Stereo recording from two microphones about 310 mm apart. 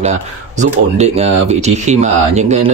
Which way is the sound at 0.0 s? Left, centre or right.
Right.